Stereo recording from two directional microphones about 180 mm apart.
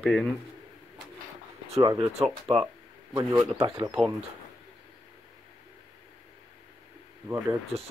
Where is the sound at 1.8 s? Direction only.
20° right (ahead or behind).